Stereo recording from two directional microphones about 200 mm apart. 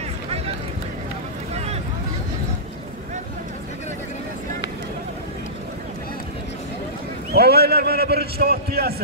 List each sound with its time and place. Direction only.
7.3 s a man's voice: 50° right (ahead or behind)